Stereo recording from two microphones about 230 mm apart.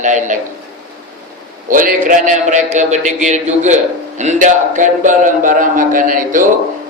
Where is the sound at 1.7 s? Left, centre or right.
Right.